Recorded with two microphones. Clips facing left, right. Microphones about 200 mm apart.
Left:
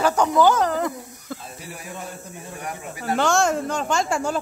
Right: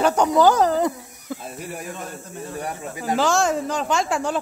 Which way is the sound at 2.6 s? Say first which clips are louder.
Right 3 dB; 30° right (ahead or behind).